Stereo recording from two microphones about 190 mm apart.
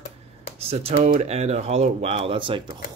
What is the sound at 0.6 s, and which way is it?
Speech, 30° right (ahead or behind).